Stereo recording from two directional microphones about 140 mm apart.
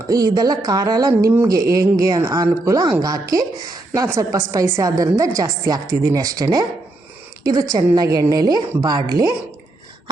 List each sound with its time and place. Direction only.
0.1 s a woman's voice: 25° right (ahead or behind)
7.7 s a woman's voice: 25° right (ahead or behind)